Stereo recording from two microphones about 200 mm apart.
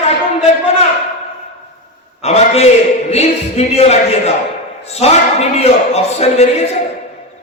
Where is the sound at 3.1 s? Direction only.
30° left (ahead or behind).